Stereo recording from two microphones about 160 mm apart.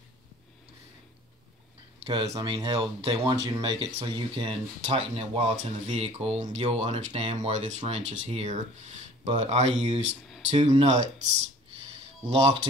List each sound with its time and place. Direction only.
2.0 s speech: 35° right (ahead or behind)